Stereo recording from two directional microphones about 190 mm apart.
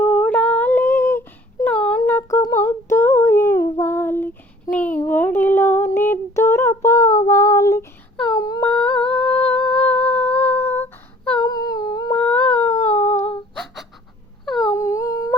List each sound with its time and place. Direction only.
0.0 s humming: 5° left (ahead or behind)
2.4 s female singing: 15° left (ahead or behind)
4.7 s a sound: 10° left (ahead or behind)
8.4 s humming: 20° left (ahead or behind)
8.6 s humming: 5° left (ahead or behind)
12.1 s humming: 5° left (ahead or behind)
14.4 s wail: centre (ahead or behind)
14.7 s humming: 15° left (ahead or behind)